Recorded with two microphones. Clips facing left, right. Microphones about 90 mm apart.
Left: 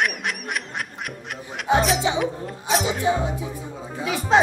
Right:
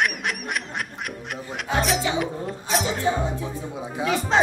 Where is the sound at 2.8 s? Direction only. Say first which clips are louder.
Left 2 dB; 15° left (ahead or behind).